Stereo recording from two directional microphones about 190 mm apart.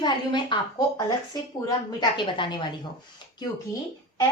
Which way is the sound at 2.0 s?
25° left (ahead or behind).